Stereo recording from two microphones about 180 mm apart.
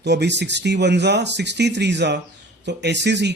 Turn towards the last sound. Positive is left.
turn(degrees=-75)  # may be behind; listen again after turning